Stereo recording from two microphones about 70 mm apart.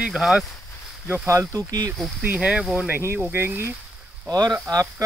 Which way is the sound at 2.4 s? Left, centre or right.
Centre.